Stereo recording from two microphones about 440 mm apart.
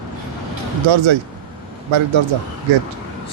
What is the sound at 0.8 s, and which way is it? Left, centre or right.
Speech, right.